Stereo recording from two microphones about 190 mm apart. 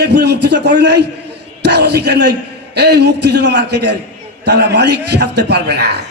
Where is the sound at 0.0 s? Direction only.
60° right (ahead or behind).